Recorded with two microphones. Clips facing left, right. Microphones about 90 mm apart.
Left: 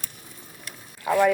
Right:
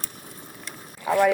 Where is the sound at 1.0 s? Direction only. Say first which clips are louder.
Even; centre (ahead or behind).